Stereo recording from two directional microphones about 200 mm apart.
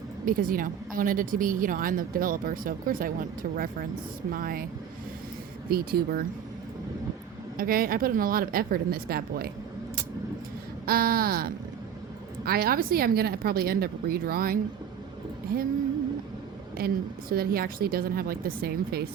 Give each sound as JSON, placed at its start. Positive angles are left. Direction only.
{"t": 0.3, "sound": "speech", "side_deg": -45}
{"t": 5.7, "sound": "speech", "side_deg": -50}
{"t": 7.5, "sound": "speech", "side_deg": -45}
{"t": 10.8, "sound": "speech", "side_deg": -50}
{"t": 16.7, "sound": "speech", "side_deg": -50}